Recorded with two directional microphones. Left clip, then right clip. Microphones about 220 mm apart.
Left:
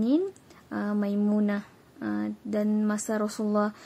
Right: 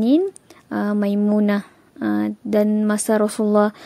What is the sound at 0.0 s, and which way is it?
Speech, 40° right (ahead or behind).